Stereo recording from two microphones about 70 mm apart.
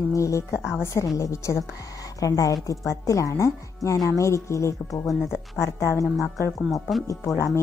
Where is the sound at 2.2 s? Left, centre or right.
Left.